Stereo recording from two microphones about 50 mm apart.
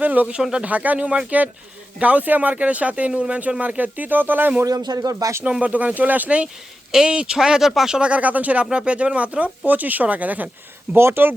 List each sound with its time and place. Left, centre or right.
0.0 s speech: right
5.5 s speech: right
10.9 s speech: right